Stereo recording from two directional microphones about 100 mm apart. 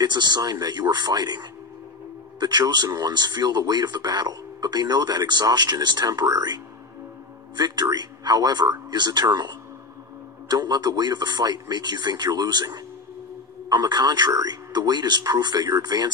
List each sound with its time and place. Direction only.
0.0 s speech: 45° right (ahead or behind)